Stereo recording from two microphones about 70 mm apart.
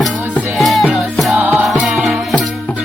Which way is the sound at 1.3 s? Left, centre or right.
Right.